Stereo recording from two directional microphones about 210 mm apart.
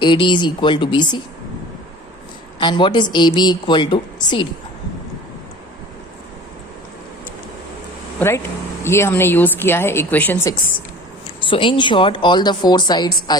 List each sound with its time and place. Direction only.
0.0 s a woman's voice: 20° left (ahead or behind)
2.6 s a woman's voice: 20° left (ahead or behind)
8.8 s a woman's voice: 10° left (ahead or behind)
11.4 s a woman's voice: 25° left (ahead or behind)